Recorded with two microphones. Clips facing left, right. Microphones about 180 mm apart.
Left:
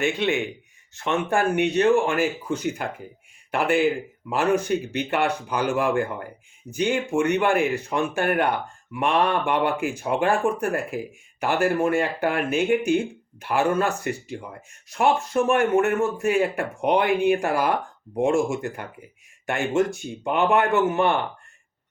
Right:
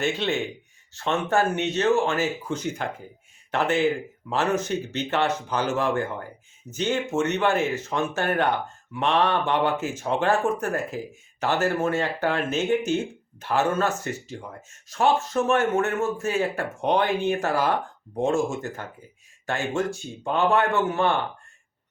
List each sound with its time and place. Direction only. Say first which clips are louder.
0.0 s speech: left 2 dB; 15° left (ahead or behind)